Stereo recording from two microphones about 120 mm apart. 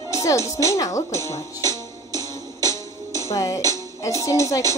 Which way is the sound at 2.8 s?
25° left (ahead or behind).